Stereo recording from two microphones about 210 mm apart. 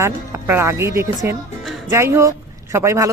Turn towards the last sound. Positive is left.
turn(degrees=-15)  # may be behind; listen again after turning